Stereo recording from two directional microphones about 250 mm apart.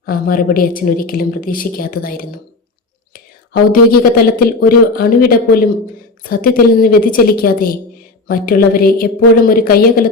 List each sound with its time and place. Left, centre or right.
0.0 s speech: left